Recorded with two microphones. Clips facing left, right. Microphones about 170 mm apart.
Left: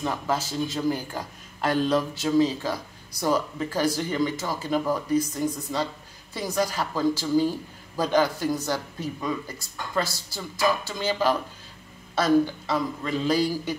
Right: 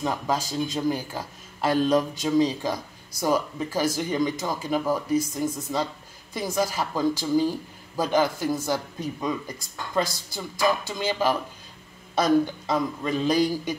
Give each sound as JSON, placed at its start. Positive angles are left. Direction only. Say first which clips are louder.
{"t": 0.0, "sound": "speech", "louder": "right 1 dB", "side_deg": -15}